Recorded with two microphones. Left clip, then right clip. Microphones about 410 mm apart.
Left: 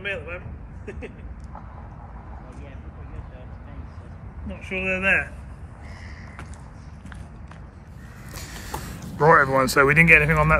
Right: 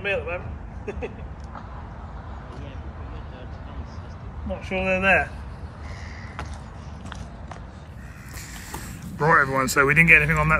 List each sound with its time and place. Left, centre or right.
0.0 s speech: centre
4.6 s speech: centre
8.4 s speech: centre